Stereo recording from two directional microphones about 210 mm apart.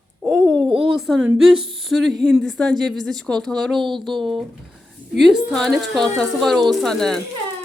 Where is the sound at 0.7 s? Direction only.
25° right (ahead or behind).